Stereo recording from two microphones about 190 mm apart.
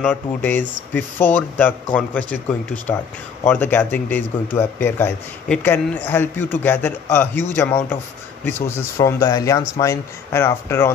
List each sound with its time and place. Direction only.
0.0 s speech: 10° left (ahead or behind)